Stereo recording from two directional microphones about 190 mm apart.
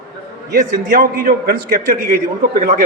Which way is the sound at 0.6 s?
45° right (ahead or behind).